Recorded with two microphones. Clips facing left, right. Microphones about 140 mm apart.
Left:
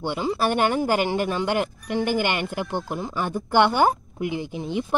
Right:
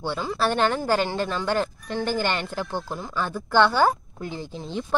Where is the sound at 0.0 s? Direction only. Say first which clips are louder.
Left 2 dB; 15° left (ahead or behind).